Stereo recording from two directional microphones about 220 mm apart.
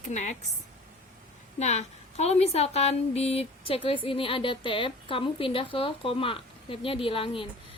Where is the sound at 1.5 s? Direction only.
30° left (ahead or behind).